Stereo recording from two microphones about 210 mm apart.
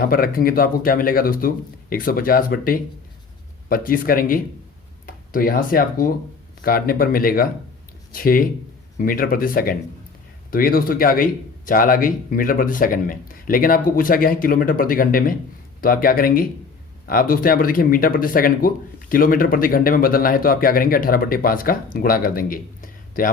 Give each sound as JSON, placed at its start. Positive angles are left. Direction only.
{"t": 0.0, "sound": "speech", "side_deg": 45}